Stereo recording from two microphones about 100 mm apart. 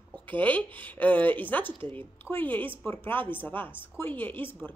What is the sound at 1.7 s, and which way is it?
Speech, 60° right (ahead or behind).